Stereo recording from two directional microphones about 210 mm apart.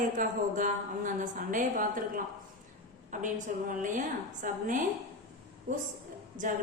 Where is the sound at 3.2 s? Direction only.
35° right (ahead or behind).